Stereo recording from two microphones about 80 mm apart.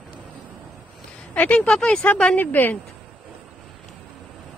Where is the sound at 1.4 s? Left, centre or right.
Centre.